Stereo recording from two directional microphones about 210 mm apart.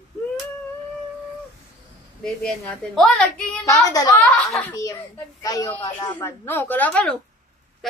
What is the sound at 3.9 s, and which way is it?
Speech, 15° left (ahead or behind).